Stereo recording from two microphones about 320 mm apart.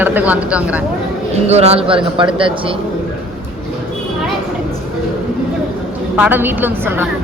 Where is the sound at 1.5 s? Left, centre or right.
Centre.